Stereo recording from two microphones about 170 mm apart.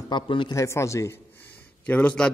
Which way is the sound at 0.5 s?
15° left (ahead or behind).